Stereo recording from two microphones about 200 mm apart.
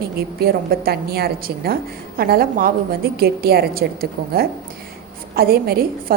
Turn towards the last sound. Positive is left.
turn(degrees=-50)  # may be behind; listen again after turning